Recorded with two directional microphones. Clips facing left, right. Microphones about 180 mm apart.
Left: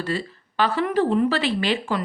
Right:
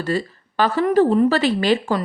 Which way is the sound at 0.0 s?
45° right (ahead or behind).